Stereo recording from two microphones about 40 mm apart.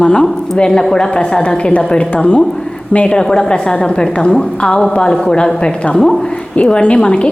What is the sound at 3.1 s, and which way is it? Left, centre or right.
A woman's voice, left.